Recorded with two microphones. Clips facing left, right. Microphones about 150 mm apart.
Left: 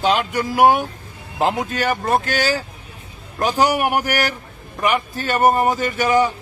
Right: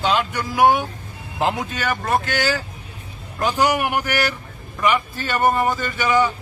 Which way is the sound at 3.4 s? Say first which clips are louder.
Left 2 dB; 35° left (ahead or behind).